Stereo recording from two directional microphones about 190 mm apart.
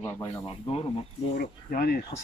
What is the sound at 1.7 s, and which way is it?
Speech, 50° left (ahead or behind).